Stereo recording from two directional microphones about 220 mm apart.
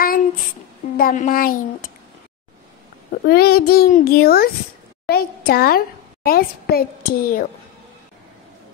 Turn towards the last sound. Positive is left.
turn(degrees=40)  # may be behind; listen again after turning